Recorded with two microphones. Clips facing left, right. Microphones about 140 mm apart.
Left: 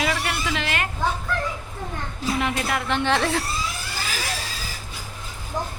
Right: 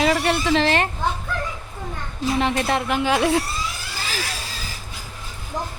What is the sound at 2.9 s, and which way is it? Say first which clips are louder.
Speech: right 1 dB; 10° right (ahead or behind).